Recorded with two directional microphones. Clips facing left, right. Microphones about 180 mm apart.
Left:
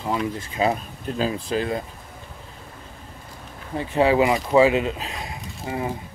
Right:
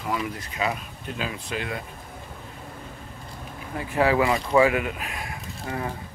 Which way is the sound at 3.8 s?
25° left (ahead or behind).